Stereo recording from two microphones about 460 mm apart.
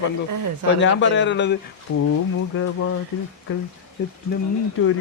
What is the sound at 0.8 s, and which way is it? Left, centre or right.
Speech, left.